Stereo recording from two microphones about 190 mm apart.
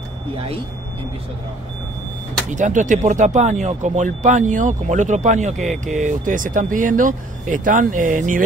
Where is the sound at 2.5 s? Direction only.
40° right (ahead or behind).